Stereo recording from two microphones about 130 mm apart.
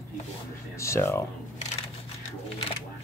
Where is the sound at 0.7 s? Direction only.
20° left (ahead or behind).